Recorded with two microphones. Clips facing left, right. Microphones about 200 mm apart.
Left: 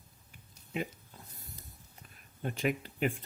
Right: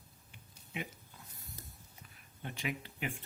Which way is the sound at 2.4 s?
45° left (ahead or behind).